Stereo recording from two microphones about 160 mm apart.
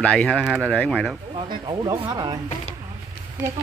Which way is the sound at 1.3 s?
30° right (ahead or behind).